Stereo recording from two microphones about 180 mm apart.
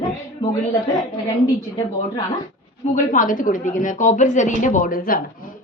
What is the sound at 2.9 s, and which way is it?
A woman's voice, 50° left (ahead or behind).